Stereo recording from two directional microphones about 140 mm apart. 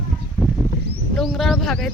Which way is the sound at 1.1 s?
Centre (ahead or behind).